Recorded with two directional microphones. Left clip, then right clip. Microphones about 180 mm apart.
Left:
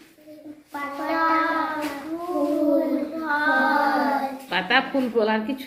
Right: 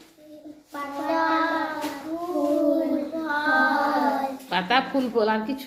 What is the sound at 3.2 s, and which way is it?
Child singing, 15° right (ahead or behind).